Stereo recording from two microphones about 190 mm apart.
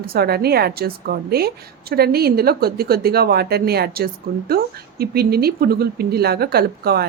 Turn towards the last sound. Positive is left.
turn(degrees=-55)  # may be behind; listen again after turning